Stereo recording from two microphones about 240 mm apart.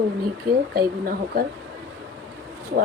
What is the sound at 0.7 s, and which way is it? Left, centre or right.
Speech, right.